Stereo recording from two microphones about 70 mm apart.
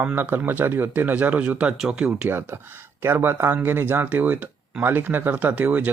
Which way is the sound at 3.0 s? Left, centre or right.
Right.